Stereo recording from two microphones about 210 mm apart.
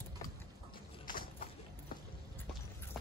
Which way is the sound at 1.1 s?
45° left (ahead or behind).